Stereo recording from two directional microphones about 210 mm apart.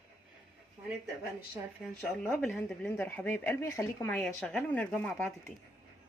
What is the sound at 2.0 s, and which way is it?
Speech, 5° left (ahead or behind).